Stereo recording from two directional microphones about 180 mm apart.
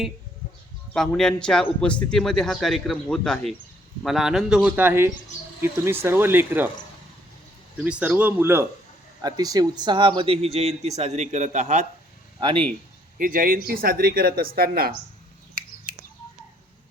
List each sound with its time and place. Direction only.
0.9 s a man's voice: 5° left (ahead or behind)
7.8 s a man's voice: 5° right (ahead or behind); by 11.9 s 40° right (ahead or behind)
12.4 s speech: 30° right (ahead or behind)
13.1 s speech: 50° right (ahead or behind)